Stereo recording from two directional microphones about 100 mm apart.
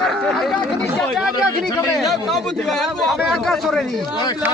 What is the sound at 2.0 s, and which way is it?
A man's voice, centre (ahead or behind).